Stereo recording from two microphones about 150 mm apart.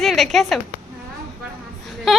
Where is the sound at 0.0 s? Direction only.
Centre (ahead or behind).